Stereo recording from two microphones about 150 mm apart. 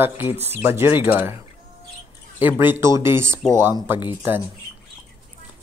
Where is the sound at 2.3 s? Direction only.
15° right (ahead or behind).